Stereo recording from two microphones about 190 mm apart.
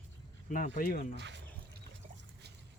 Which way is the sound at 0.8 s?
50° left (ahead or behind).